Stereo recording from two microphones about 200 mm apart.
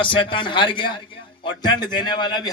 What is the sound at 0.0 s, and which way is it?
A man's voice, 25° left (ahead or behind).